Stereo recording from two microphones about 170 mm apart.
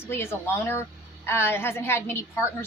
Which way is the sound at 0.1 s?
15° left (ahead or behind).